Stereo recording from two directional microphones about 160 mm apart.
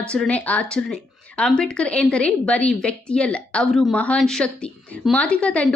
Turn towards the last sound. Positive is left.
turn(degrees=5)  # may be behind; listen again after turning